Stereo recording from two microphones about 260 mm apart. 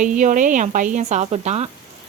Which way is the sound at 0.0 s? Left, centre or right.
Right.